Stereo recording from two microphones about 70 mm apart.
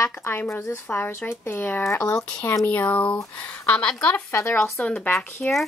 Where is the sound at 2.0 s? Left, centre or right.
Centre.